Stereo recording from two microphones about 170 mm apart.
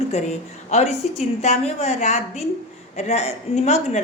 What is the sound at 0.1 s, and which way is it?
A woman's voice, 40° left (ahead or behind).